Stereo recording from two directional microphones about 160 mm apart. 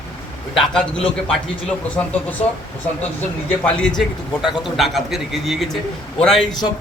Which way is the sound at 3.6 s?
5° left (ahead or behind).